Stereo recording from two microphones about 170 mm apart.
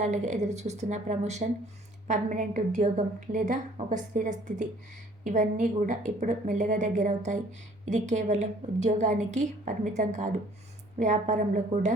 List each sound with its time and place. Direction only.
0.0 s a woman's voice: 45° right (ahead or behind)